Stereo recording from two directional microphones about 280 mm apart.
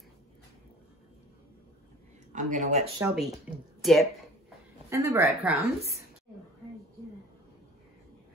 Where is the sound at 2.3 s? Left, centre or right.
Right.